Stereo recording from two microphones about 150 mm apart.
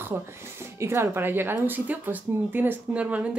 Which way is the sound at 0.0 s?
15° right (ahead or behind).